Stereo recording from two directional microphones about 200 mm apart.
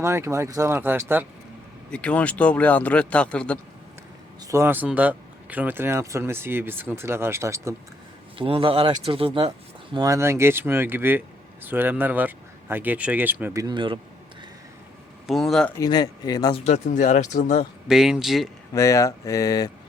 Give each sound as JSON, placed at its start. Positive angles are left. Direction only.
{"t": 0.0, "sound": "speech", "side_deg": -15}
{"t": 1.9, "sound": "a man's voice", "side_deg": 5}
{"t": 4.4, "sound": "speech", "side_deg": -15}
{"t": 8.4, "sound": "speech", "side_deg": -25}
{"t": 15.3, "sound": "a man's voice", "side_deg": 0}
{"t": 15.8, "sound": "speech", "side_deg": 20}
{"t": 17.8, "sound": "a man's voice", "side_deg": 0}
{"t": 18.7, "sound": "speech", "side_deg": 15}